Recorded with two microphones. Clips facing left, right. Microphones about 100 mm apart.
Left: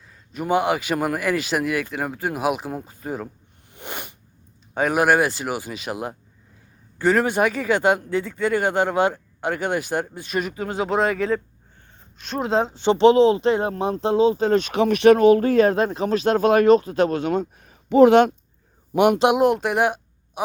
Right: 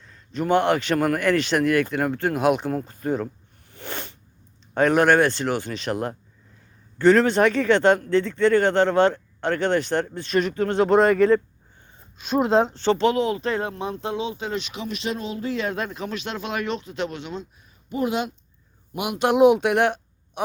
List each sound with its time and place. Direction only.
0.1 s speech: 10° left (ahead or behind)
3.7 s sneeze: 15° left (ahead or behind)
4.7 s speech: 5° left (ahead or behind)
12.1 s speech: 10° right (ahead or behind)
12.5 s speech: centre (ahead or behind)
12.7 s speech: 15° left (ahead or behind)
13.7 s speech: 35° left (ahead or behind)
17.6 s a sound: 80° left
18.9 s speech: 60° left (ahead or behind)
19.4 s a woman's voice: centre (ahead or behind)